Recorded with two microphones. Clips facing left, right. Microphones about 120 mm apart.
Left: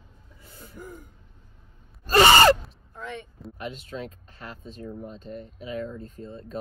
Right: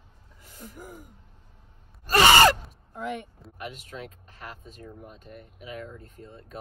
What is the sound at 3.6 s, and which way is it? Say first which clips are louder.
Speech: left 3 dB; 35° left (ahead or behind).